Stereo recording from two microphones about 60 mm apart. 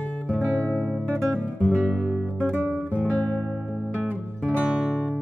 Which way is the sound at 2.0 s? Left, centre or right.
Centre.